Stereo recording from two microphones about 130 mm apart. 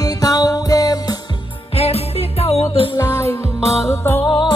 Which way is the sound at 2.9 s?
25° left (ahead or behind).